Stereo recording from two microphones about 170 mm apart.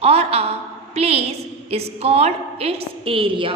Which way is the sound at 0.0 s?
35° right (ahead or behind).